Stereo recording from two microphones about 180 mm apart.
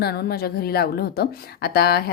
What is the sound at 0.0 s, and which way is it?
A woman's voice, 60° left (ahead or behind).